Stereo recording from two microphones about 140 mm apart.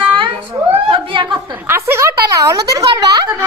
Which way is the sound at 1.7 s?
20° right (ahead or behind).